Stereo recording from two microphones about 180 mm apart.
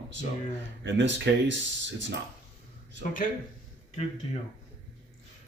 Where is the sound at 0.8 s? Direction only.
80° right.